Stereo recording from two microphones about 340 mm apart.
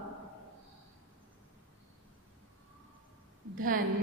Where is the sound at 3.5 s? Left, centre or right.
Right.